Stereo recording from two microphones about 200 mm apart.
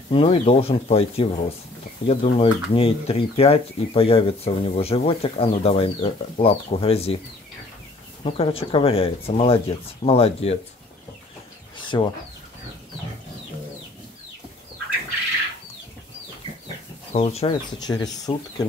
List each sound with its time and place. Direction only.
0.1 s speech: 30° left (ahead or behind)
8.2 s speech: 25° left (ahead or behind)
11.9 s speech: 20° left (ahead or behind)
17.1 s speech: 30° left (ahead or behind)
17.7 s speech: 20° left (ahead or behind)